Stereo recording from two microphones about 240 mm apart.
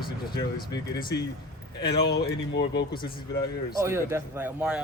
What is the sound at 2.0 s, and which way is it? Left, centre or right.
Speech, left.